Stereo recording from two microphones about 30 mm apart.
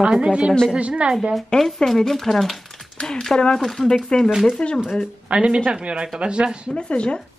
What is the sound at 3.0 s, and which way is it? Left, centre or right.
Speech, left.